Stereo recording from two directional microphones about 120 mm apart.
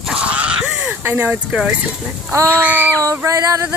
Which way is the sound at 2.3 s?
20° right (ahead or behind).